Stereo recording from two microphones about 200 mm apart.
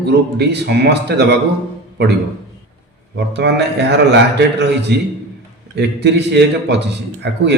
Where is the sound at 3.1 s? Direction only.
60° right (ahead or behind).